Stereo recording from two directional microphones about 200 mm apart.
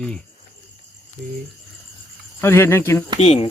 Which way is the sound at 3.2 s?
35° left (ahead or behind).